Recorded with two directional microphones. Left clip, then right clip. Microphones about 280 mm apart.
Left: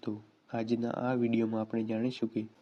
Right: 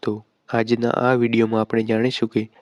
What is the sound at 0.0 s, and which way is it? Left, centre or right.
Speech, right.